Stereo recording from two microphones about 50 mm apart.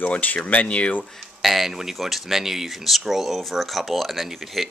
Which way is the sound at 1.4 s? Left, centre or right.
Centre.